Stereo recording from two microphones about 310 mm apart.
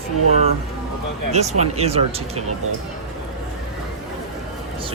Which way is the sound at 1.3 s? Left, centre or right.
Right.